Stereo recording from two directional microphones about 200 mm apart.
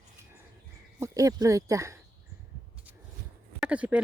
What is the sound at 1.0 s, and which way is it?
Speech, 15° right (ahead or behind).